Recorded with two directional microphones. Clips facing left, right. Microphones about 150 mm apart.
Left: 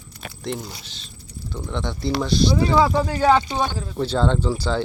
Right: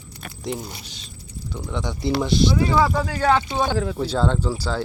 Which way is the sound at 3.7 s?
80° right.